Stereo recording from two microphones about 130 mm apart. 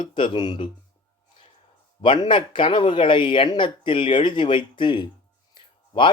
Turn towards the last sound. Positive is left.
turn(degrees=40)  # may be behind; listen again after turning